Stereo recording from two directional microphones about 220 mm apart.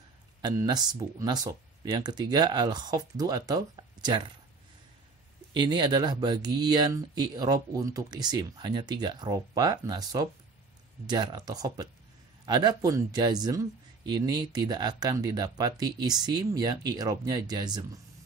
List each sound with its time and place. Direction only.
0.4 s speech: 15° right (ahead or behind)
5.5 s speech: 20° right (ahead or behind)